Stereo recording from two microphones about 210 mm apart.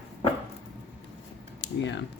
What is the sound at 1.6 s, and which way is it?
Typing, 60° left (ahead or behind).